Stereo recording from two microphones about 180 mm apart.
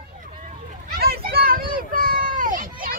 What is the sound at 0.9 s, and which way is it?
Children playing, 55° right (ahead or behind).